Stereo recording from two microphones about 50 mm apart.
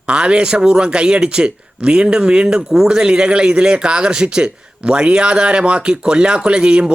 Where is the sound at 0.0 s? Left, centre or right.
Right.